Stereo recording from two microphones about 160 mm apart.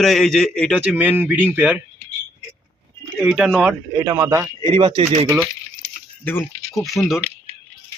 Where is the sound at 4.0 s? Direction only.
20° right (ahead or behind).